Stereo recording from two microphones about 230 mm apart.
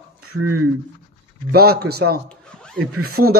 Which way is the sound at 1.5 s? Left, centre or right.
Right.